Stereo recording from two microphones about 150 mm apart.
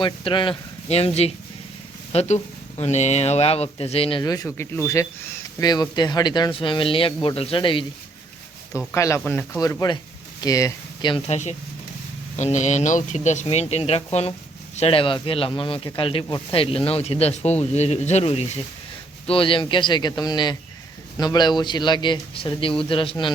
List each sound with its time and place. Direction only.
0.0 s speech: 35° left (ahead or behind)
4.2 s a man's voice: 25° left (ahead or behind)
5.5 s speech: 25° left (ahead or behind)
8.9 s speech: 20° left (ahead or behind)
9.6 s a man's voice: 20° left (ahead or behind)
11.3 s a man's voice: 50° left (ahead or behind); by 23.3 s 35° left (ahead or behind)